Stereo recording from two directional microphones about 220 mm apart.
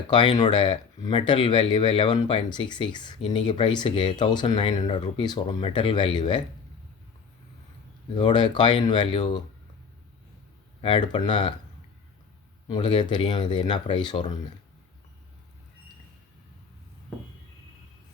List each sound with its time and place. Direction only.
0.1 s speech: 20° left (ahead or behind)
8.1 s speech: 20° left (ahead or behind)
10.8 s speech: 20° left (ahead or behind)
12.6 s speech: 20° left (ahead or behind)